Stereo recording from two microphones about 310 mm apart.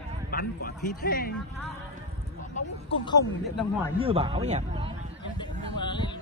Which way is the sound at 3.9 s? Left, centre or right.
Centre.